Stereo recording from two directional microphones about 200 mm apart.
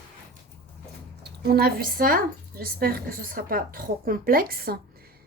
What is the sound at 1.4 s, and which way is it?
A woman's voice, 50° right (ahead or behind).